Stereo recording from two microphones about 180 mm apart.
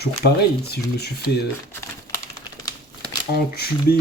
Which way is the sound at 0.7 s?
65° left (ahead or behind).